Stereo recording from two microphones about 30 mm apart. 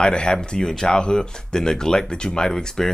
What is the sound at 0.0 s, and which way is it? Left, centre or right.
Speech, left.